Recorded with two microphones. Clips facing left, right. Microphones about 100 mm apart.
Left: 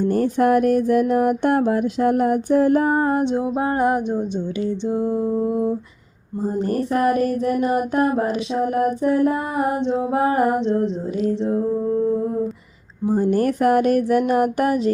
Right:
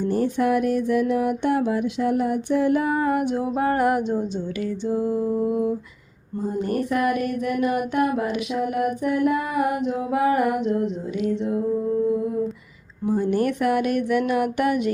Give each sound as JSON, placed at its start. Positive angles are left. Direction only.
{"t": 0.0, "sound": "mantra", "side_deg": 50}
{"t": 3.2, "sound": "music", "side_deg": 25}
{"t": 6.6, "sound": "a sound", "side_deg": 35}